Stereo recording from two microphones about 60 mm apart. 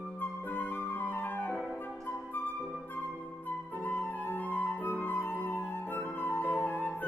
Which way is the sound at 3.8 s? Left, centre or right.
Left.